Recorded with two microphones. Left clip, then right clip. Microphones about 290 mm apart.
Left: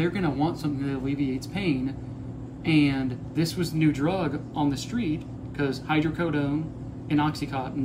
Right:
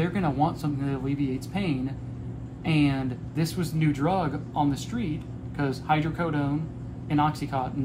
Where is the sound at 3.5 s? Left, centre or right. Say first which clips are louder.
Left 3 dB; centre.